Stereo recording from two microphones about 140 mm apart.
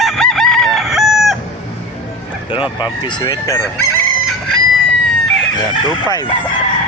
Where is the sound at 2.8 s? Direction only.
35° left (ahead or behind).